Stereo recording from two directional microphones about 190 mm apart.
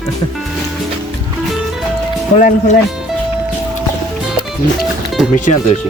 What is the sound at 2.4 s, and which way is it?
Speech, 40° left (ahead or behind).